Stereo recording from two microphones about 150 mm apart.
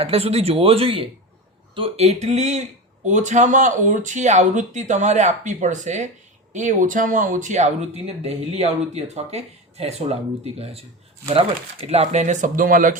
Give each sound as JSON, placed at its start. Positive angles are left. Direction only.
{"t": 0.0, "sound": "speech", "side_deg": -40}